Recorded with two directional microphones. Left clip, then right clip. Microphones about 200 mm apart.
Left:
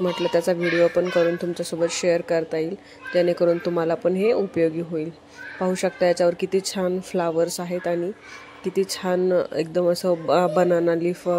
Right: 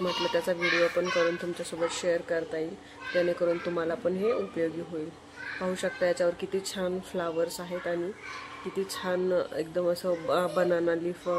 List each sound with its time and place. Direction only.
0.0 s a child's voice: 30° left (ahead or behind)